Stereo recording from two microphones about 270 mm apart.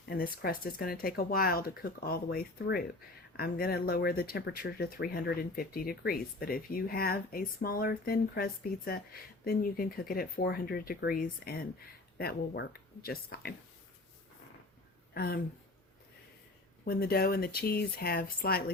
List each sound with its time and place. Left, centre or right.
0.0 s speech: left
15.1 s speech: left
16.8 s speech: left